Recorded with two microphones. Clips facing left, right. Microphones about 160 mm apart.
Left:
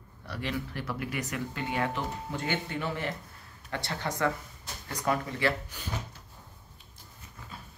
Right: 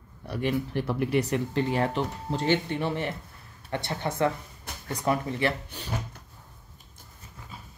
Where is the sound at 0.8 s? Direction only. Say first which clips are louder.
Right 9 dB; 30° right (ahead or behind).